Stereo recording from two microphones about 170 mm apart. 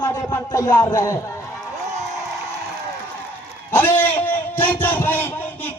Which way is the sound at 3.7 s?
10° left (ahead or behind).